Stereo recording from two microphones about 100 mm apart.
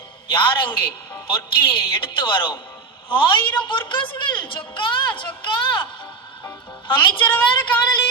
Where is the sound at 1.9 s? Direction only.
60° left (ahead or behind).